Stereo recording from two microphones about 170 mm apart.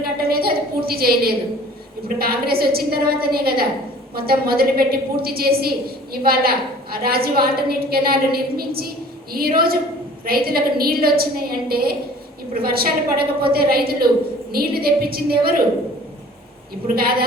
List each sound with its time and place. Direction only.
0.0 s a sound: 60° right (ahead or behind)
2.0 s a woman's voice: 60° right (ahead or behind)
16.8 s a woman's voice: 60° right (ahead or behind)